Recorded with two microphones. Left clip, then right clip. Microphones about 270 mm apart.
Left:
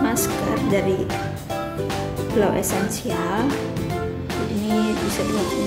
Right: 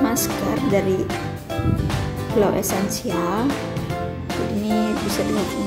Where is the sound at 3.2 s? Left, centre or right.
Centre.